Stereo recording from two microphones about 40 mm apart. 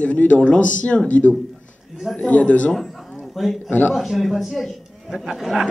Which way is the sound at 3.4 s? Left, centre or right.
Centre.